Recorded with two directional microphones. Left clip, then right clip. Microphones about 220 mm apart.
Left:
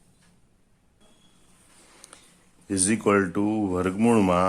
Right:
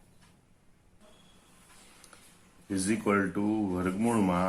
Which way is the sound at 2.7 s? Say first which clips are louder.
Left 6 dB; 45° left (ahead or behind).